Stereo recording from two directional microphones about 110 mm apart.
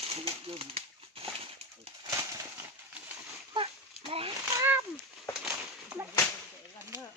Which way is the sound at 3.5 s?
60° right (ahead or behind).